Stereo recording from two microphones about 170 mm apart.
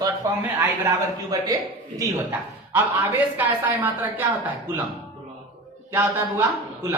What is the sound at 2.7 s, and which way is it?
Speech, 10° right (ahead or behind).